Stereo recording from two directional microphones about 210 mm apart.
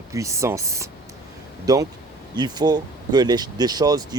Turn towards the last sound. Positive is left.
turn(degrees=-20)  # may be behind; listen again after turning